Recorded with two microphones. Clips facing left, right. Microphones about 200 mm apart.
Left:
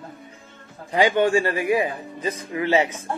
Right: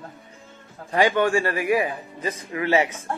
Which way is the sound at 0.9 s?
20° left (ahead or behind).